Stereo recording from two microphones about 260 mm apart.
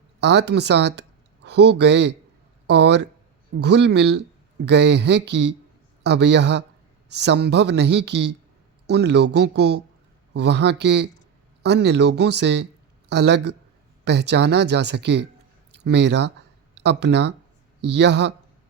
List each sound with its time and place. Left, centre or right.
0.2 s speech: right